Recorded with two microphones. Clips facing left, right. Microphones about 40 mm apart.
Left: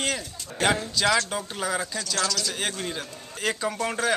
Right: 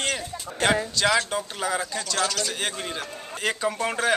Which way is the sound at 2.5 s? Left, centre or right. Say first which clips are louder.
Even; centre.